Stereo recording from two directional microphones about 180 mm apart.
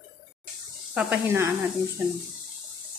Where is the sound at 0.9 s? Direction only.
10° right (ahead or behind).